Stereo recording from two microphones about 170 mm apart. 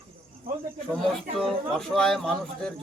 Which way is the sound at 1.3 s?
5° left (ahead or behind).